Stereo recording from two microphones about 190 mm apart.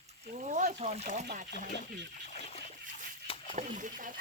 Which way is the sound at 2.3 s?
35° left (ahead or behind).